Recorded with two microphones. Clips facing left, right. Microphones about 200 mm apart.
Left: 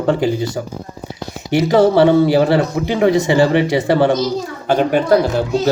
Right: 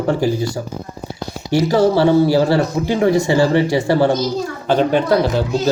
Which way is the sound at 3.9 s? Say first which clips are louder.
Left 2 dB; 60° left (ahead or behind).